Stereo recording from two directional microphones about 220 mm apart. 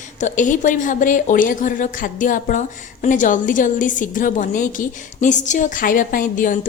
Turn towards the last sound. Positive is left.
turn(degrees=35)  # may be behind; listen again after turning